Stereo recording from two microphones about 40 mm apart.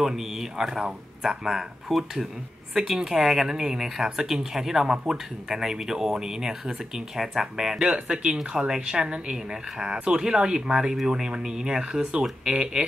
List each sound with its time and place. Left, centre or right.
0.0 s speech: centre
2.8 s speech: centre
7.9 s speech: right